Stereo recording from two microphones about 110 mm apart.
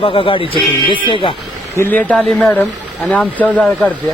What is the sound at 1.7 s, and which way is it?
Speech, 20° left (ahead or behind).